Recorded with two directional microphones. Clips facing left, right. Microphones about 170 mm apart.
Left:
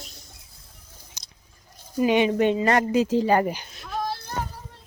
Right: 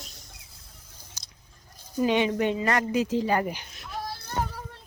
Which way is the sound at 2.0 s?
15° left (ahead or behind).